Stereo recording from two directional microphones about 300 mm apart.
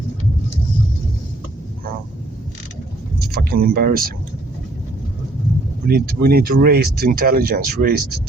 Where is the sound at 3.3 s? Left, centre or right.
Right.